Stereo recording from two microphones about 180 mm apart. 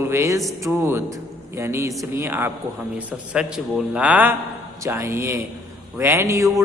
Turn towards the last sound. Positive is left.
turn(degrees=-15)  # may be behind; listen again after turning